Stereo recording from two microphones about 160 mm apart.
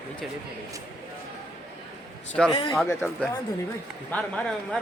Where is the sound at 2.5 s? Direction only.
30° left (ahead or behind).